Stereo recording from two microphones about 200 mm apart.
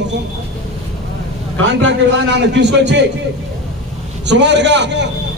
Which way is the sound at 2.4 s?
60° right (ahead or behind).